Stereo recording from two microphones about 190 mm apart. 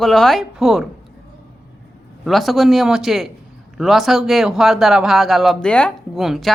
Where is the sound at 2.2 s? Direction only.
Centre (ahead or behind).